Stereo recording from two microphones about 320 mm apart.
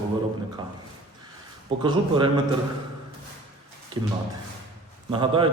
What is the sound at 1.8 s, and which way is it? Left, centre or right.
Speech, centre.